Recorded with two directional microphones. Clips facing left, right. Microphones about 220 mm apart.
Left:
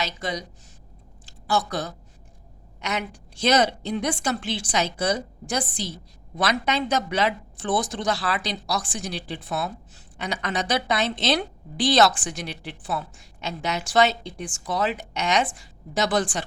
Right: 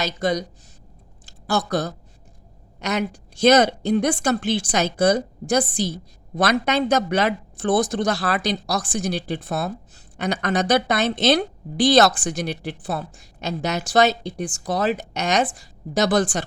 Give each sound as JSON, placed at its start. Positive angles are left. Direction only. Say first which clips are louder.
{"t": 0.0, "sound": "a woman's voice", "louder": "right 7 dB", "side_deg": -40}
{"t": 1.2, "sound": "a sound", "louder": "right 2 dB", "side_deg": -45}
{"t": 3.4, "sound": "a woman's voice", "louder": "right 6 dB", "side_deg": -50}